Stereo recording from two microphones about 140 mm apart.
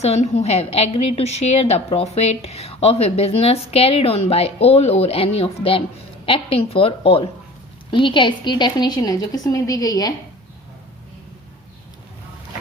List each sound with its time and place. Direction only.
0.0 s a woman's voice: 50° left (ahead or behind); by 10.1 s 25° left (ahead or behind)